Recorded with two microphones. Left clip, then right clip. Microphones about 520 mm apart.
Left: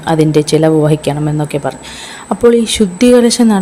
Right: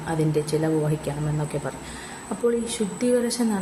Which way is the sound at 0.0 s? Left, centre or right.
Right.